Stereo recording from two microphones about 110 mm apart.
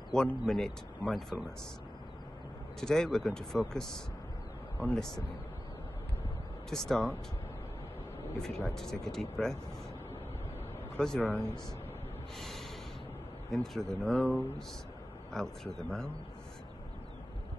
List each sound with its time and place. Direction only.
0.1 s a man's voice: 5° left (ahead or behind)
2.8 s a man's voice: 5° left (ahead or behind)
6.7 s a man's voice: 5° left (ahead or behind)
8.4 s a man's voice: 5° left (ahead or behind)
11.0 s a man's voice: 5° left (ahead or behind)
11.2 s speech: 20° right (ahead or behind)
12.4 s snort: centre (ahead or behind)
13.5 s a man's voice: centre (ahead or behind)